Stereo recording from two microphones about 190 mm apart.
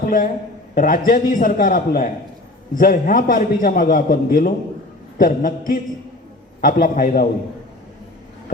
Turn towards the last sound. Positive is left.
turn(degrees=50)  # may be behind; listen again after turning